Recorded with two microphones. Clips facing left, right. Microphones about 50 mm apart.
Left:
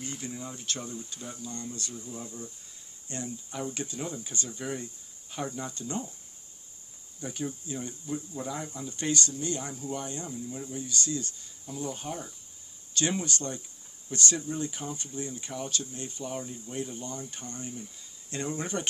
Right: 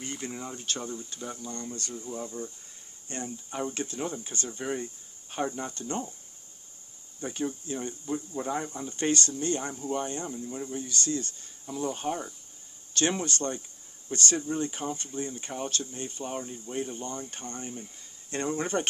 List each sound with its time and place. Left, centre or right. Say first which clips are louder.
0.0 s speech: right 2 dB; right
7.2 s speech: right 3 dB; right
8.4 s speech: right 4 dB; right
11.6 s speech: right 5 dB; right